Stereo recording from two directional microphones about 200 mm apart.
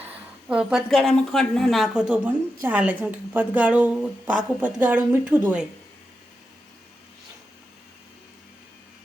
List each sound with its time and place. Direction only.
0.0 s a woman's voice: 5° right (ahead or behind)